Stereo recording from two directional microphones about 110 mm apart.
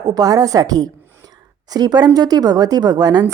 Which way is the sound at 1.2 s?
35° right (ahead or behind).